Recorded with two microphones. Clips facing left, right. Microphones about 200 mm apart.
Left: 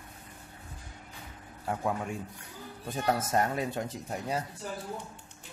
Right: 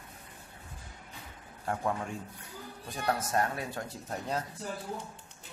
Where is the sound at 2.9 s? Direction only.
25° left (ahead or behind).